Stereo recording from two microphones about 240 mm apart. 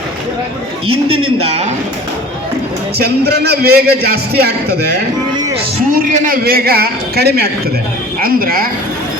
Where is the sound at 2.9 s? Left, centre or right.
Right.